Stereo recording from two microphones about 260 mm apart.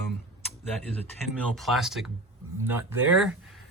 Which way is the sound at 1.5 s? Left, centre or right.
Centre.